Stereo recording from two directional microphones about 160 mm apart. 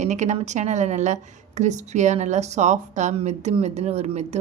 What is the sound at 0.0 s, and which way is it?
Speech, 45° right (ahead or behind).